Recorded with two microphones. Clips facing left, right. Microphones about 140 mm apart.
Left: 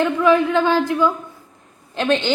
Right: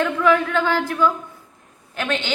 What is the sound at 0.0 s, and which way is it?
A woman's voice, 15° left (ahead or behind).